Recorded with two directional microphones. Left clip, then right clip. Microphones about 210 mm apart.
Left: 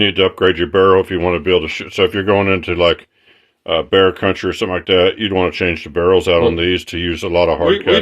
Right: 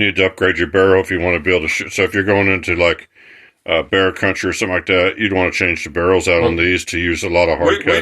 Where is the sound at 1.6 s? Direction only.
55° left (ahead or behind).